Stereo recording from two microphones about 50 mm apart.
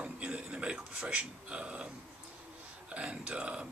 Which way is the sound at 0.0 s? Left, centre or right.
Right.